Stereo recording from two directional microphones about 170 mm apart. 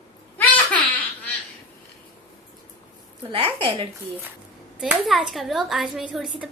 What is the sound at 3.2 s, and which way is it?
Speech, 30° right (ahead or behind).